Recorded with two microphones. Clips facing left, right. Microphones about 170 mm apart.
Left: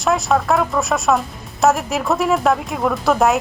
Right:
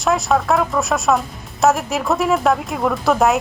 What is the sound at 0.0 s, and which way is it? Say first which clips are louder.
A man's voice: even; centre (ahead or behind).